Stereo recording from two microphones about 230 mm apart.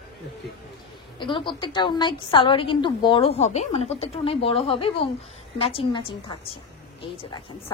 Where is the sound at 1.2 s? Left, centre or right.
Left.